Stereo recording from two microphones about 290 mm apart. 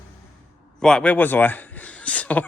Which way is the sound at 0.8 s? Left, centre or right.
Centre.